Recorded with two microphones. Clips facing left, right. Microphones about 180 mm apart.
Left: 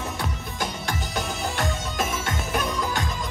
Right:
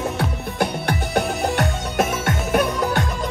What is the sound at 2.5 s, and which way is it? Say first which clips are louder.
Music: right 8 dB; 65° right (ahead or behind).